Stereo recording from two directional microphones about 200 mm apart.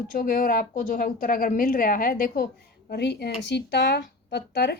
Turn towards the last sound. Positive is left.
turn(degrees=55)  # may be behind; listen again after turning